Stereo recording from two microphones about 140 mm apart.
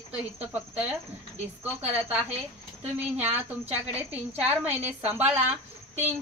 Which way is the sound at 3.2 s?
15° right (ahead or behind).